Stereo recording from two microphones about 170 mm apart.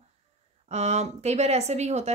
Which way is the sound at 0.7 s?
40° right (ahead or behind).